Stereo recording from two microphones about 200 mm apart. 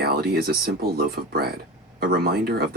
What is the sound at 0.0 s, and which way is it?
Speech, 50° right (ahead or behind).